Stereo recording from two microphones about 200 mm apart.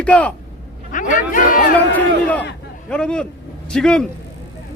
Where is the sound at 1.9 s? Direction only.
10° left (ahead or behind).